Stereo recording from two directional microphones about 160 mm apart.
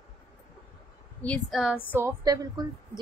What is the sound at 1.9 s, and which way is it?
Speech, 20° right (ahead or behind).